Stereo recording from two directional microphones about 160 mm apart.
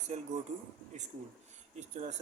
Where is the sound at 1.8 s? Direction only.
45° right (ahead or behind).